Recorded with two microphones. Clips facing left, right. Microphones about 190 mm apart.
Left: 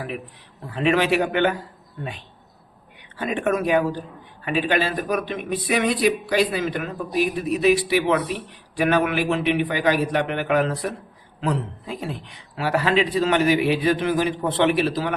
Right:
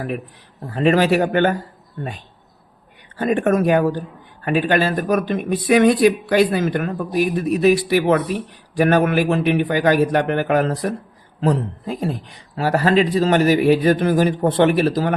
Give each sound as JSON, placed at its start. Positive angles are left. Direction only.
{"t": 0.7, "sound": "speech", "side_deg": -45}
{"t": 3.2, "sound": "speech", "side_deg": -45}